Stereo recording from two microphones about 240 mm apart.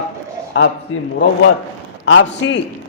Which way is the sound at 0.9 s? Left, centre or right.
Left.